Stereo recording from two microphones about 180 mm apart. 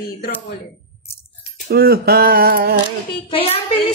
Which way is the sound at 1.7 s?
60° right (ahead or behind).